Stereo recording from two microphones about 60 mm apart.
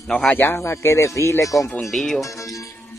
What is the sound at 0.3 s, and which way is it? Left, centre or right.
Speech, left.